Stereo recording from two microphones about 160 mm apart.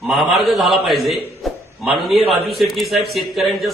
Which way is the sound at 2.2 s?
40° right (ahead or behind).